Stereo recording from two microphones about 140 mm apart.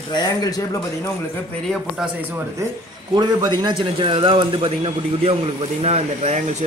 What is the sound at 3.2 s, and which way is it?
A man's voice, 30° right (ahead or behind).